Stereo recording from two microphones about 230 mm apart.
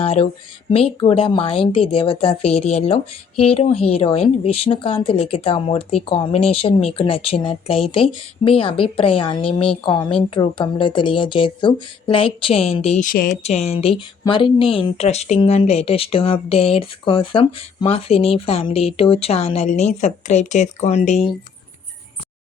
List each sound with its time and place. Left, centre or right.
0.0 s a woman's voice: left